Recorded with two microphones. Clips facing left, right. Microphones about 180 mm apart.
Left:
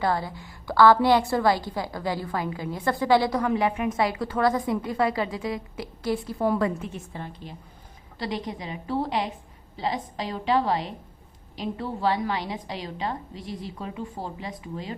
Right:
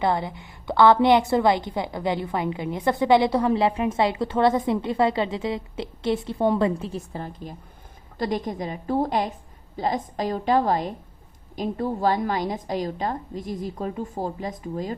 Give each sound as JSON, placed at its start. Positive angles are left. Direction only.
{"t": 0.0, "sound": "a woman's voice", "side_deg": -20}